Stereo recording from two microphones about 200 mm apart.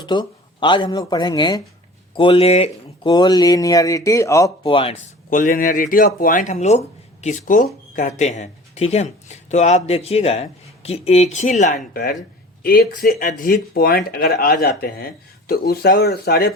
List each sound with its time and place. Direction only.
0.0 s speech: 20° left (ahead or behind)
4.6 s a man's voice: 25° left (ahead or behind)
5.3 s speech: 45° left (ahead or behind)